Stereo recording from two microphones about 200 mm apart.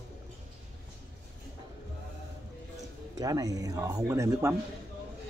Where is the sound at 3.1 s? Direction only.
15° right (ahead or behind).